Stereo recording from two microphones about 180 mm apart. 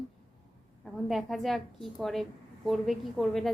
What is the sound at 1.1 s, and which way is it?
A woman's voice, centre (ahead or behind).